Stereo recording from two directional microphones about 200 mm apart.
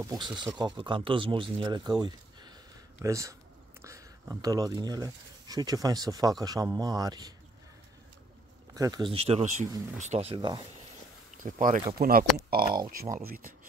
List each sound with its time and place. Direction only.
0.0 s speech: 20° right (ahead or behind)
8.7 s speech: 20° right (ahead or behind); by 10.3 s 35° right (ahead or behind)
10.3 s speech: 20° right (ahead or behind)
11.3 s speech: 40° right (ahead or behind)